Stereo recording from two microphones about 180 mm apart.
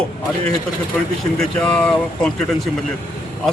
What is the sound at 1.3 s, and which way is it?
A man's voice, 5° left (ahead or behind).